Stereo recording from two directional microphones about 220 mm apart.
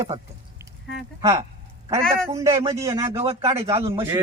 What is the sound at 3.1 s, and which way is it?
Speech, 25° right (ahead or behind).